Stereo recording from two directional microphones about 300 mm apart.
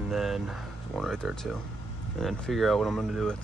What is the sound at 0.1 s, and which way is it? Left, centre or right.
Speech, centre.